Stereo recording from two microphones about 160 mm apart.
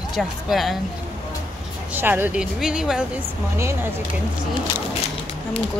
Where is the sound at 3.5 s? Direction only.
15° right (ahead or behind).